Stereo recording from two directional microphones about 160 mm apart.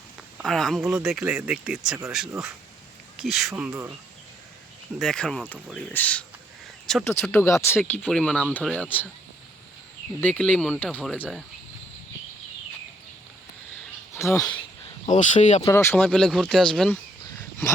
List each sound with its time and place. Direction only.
0.4 s speech: centre (ahead or behind)
3.2 s speech: centre (ahead or behind)
3.5 s speech: 15° right (ahead or behind)
4.9 s speech: 5° left (ahead or behind)
8.0 s speech: 5° left (ahead or behind)
10.2 s speech: 10° left (ahead or behind)
14.1 s speech: 20° left (ahead or behind)
15.1 s speech: 50° left (ahead or behind)
15.6 s speech: 15° left (ahead or behind)
16.0 s speech: centre (ahead or behind)